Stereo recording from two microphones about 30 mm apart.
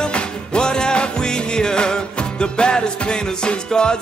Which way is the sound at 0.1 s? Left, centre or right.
Left.